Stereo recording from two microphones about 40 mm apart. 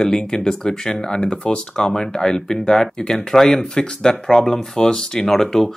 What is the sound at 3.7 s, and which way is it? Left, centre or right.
Speech, centre.